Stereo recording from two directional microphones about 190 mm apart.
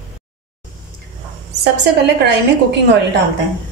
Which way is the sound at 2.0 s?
60° right (ahead or behind).